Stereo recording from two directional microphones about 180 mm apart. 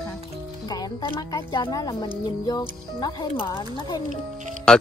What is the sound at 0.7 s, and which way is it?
Speech, 20° left (ahead or behind).